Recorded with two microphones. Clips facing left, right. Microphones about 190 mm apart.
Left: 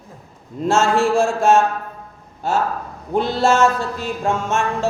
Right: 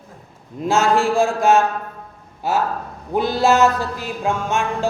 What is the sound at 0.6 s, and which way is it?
Music, centre (ahead or behind).